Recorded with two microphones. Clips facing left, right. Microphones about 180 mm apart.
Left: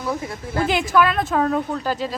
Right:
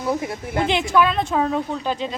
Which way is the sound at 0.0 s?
20° right (ahead or behind).